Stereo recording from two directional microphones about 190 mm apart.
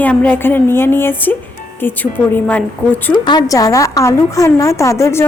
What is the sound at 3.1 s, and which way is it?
A woman's voice, 25° left (ahead or behind).